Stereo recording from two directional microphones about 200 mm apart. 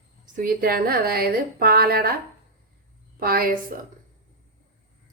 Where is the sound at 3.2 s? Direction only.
50° right (ahead or behind).